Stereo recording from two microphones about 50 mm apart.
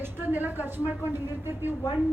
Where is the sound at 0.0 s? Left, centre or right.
Right.